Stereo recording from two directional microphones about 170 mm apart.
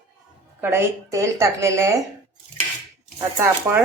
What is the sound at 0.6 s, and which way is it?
Speech, 15° right (ahead or behind).